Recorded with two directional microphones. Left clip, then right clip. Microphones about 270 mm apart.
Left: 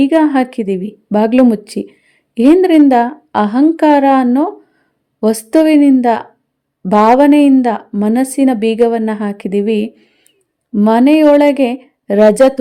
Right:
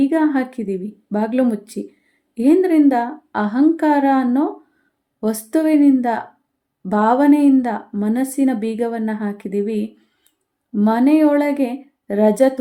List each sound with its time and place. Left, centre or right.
0.0 s a woman's voice: left